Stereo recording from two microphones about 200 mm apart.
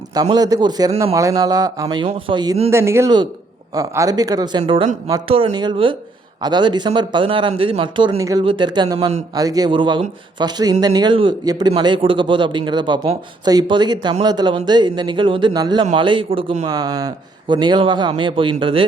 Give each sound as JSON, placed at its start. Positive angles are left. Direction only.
{"t": 0.3, "sound": "speech", "side_deg": -20}